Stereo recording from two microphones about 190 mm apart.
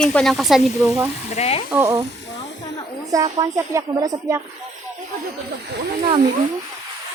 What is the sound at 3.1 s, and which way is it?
A woman's voice, 20° right (ahead or behind).